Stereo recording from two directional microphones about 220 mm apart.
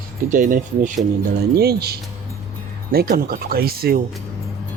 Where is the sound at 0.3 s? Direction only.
35° right (ahead or behind).